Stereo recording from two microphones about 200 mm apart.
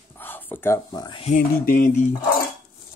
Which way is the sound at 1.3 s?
45° left (ahead or behind).